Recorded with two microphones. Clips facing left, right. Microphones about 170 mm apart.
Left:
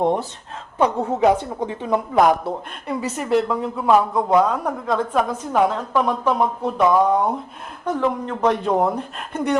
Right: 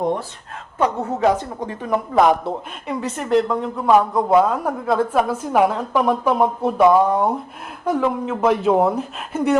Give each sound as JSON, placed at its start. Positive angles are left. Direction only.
{"t": 0.8, "sound": "a woman's voice", "side_deg": 15}
{"t": 2.1, "sound": "speech", "side_deg": 0}